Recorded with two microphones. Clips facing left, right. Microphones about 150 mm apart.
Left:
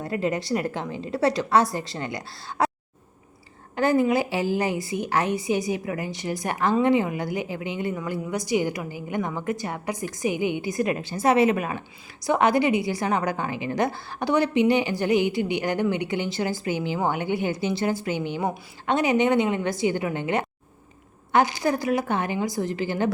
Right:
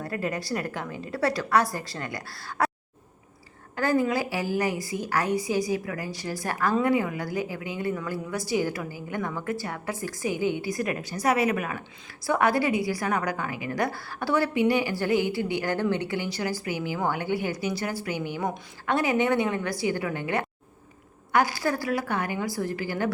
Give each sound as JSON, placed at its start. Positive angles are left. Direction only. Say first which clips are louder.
{"t": 0.0, "sound": "a woman's voice", "louder": "left 4 dB", "side_deg": 20}
{"t": 3.8, "sound": "a woman's voice", "louder": "left 4 dB", "side_deg": 25}